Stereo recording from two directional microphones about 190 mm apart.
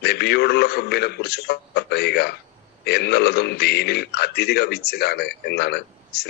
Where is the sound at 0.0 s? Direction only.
60° left (ahead or behind).